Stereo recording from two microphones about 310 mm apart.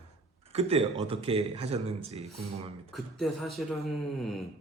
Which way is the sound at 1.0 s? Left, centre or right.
Centre.